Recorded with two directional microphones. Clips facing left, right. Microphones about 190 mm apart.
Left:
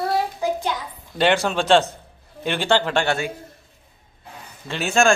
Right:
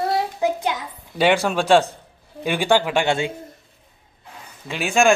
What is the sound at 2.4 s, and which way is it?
Speech, 10° right (ahead or behind).